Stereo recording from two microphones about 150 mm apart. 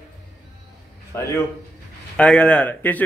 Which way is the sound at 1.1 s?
15° left (ahead or behind).